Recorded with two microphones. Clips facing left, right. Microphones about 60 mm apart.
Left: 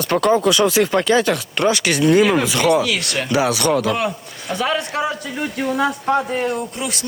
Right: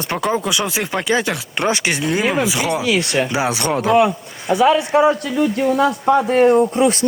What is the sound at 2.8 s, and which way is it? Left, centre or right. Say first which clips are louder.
Speech: right 4 dB; right.